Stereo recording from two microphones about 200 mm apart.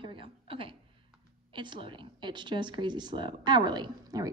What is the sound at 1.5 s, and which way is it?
A woman's voice, 25° right (ahead or behind).